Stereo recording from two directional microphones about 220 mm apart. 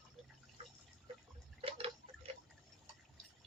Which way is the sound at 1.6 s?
25° right (ahead or behind).